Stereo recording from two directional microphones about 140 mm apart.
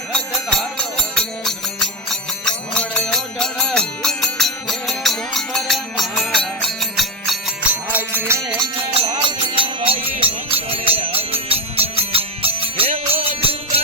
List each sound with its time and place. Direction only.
0.1 s music: 5° left (ahead or behind)
7.7 s music: 15° right (ahead or behind)
8.4 s music: 35° right (ahead or behind)